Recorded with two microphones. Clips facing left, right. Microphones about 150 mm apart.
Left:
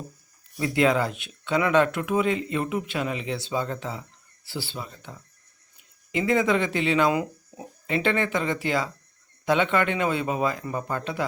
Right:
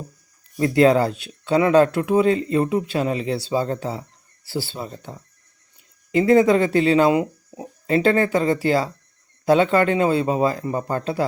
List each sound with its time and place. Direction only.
0.5 s speech: 35° right (ahead or behind)
7.9 s speech: 40° right (ahead or behind)